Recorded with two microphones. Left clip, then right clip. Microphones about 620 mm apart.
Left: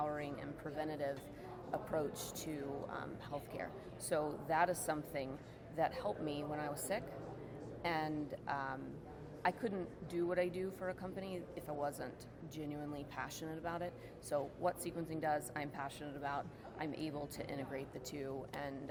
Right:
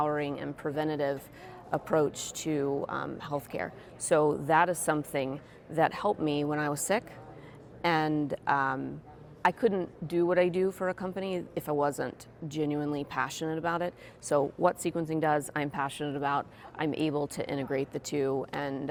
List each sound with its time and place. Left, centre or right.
0.0 s a woman's voice: right